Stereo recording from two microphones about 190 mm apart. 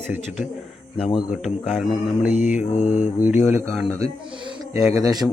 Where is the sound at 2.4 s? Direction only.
40° left (ahead or behind).